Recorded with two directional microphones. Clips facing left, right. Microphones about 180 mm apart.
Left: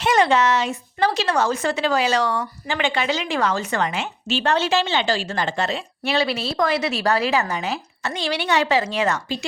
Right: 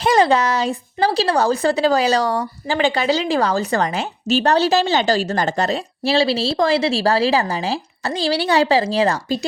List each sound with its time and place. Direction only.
0.0 s a woman's voice: 35° right (ahead or behind)